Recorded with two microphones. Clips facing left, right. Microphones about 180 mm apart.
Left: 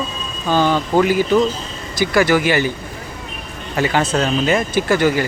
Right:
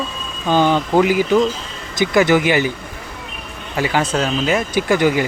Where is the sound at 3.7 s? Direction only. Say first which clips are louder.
Left 1 dB; 5° right (ahead or behind).